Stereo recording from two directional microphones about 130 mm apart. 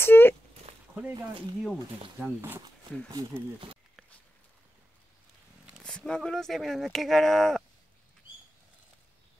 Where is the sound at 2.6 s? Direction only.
35° right (ahead or behind).